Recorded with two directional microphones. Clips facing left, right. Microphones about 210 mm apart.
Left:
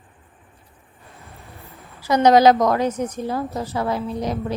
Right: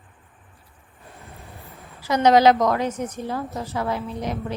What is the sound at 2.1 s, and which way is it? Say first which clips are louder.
A woman's voice: left 2 dB; 40° left (ahead or behind).